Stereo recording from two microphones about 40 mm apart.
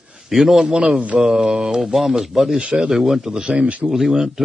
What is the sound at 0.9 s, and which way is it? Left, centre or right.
Mantra, right.